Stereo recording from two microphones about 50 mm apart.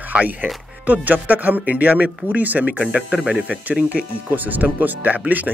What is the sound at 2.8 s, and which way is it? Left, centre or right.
Speech, right.